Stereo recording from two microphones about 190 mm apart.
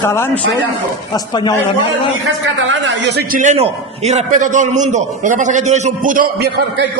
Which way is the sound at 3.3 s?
40° right (ahead or behind).